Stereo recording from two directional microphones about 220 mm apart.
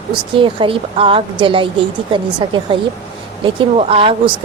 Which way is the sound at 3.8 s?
25° right (ahead or behind).